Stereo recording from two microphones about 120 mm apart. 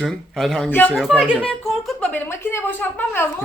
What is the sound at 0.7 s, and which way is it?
Speech, 15° left (ahead or behind).